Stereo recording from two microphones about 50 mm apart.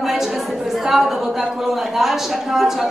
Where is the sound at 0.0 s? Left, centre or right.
Centre.